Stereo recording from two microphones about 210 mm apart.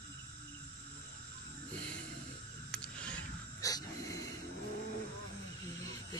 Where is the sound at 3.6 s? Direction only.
15° left (ahead or behind).